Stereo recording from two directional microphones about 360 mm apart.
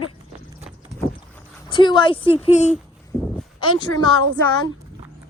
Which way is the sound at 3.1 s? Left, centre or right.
Centre.